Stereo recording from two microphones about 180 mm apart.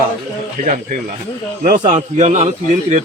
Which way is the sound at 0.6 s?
50° right (ahead or behind).